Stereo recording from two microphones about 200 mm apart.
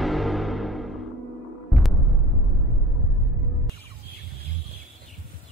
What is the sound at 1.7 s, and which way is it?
Music, centre (ahead or behind).